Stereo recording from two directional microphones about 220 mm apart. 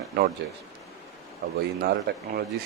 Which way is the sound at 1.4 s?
45° right (ahead or behind).